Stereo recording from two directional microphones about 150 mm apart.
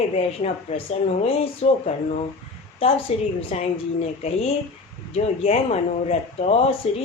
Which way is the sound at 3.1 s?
40° left (ahead or behind).